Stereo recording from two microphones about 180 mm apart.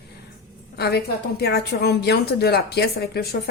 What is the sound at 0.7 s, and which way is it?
A woman's voice, 65° left (ahead or behind).